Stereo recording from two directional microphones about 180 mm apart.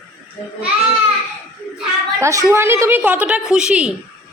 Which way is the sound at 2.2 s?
15° right (ahead or behind).